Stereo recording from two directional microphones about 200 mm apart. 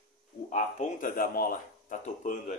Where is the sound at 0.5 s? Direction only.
40° left (ahead or behind).